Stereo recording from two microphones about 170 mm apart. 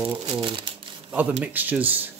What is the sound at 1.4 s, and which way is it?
Speech, 10° right (ahead or behind).